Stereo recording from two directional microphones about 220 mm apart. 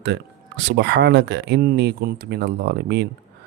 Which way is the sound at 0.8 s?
50° right (ahead or behind).